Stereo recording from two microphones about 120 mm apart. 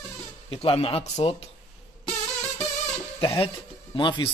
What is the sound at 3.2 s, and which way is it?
Speech, 50° left (ahead or behind).